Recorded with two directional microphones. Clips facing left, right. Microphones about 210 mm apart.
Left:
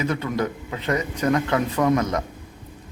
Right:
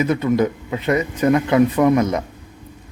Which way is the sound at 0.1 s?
10° right (ahead or behind).